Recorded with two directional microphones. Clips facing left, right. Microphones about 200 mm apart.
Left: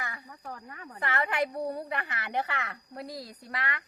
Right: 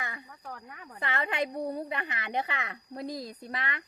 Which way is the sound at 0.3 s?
5° left (ahead or behind).